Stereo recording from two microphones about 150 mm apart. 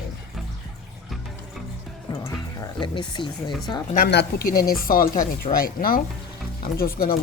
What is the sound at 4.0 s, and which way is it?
Speech, 85° left.